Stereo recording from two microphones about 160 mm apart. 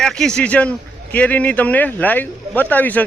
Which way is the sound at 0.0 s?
5° left (ahead or behind).